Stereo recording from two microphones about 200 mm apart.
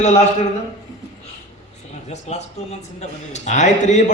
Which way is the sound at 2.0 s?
35° left (ahead or behind).